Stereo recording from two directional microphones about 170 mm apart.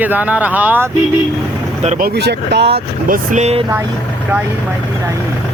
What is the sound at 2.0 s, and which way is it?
Speech, 70° right (ahead or behind).